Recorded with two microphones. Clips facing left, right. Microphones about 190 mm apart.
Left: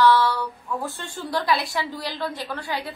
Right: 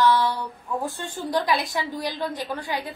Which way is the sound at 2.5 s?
20° right (ahead or behind).